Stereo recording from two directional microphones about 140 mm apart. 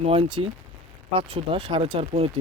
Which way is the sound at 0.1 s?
40° right (ahead or behind).